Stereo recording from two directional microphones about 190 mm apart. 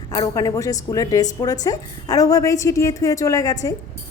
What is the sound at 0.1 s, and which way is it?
A woman's voice, 20° left (ahead or behind).